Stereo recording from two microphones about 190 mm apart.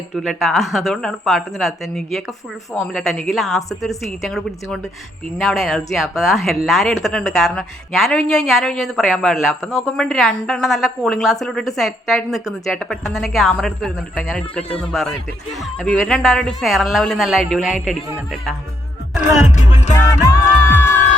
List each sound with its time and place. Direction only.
0.2 s speech: centre (ahead or behind)
20.0 s music: 15° left (ahead or behind)